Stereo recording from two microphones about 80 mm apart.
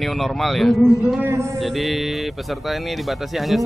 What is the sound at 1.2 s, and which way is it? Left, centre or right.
Speech, right.